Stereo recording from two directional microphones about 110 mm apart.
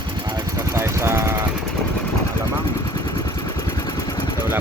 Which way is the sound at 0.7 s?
25° right (ahead or behind).